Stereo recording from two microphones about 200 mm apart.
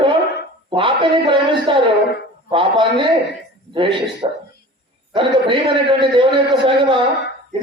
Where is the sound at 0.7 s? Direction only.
25° right (ahead or behind).